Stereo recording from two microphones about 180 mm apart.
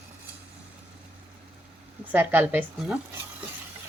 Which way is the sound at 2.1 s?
10° right (ahead or behind).